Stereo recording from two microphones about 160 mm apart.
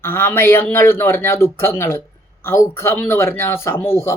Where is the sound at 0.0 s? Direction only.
15° left (ahead or behind).